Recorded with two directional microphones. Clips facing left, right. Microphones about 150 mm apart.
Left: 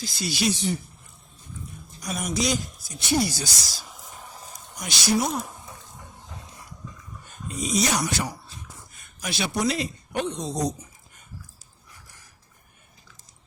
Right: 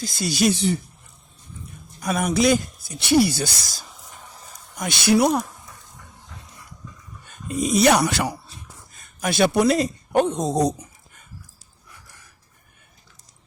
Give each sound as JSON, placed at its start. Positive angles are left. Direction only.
{"t": 0.0, "sound": "a woman's voice", "side_deg": -50}
{"t": 0.5, "sound": "speech", "side_deg": -65}
{"t": 2.0, "sound": "speech", "side_deg": -60}
{"t": 3.0, "sound": "speech", "side_deg": -65}
{"t": 5.5, "sound": "a sound", "side_deg": 25}
{"t": 7.4, "sound": "speech", "side_deg": -55}
{"t": 9.2, "sound": "a woman's voice", "side_deg": -50}
{"t": 9.7, "sound": "a woman's voice", "side_deg": -45}